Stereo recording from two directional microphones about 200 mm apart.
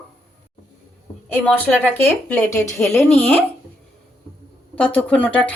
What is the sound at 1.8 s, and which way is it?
Speech, 10° left (ahead or behind).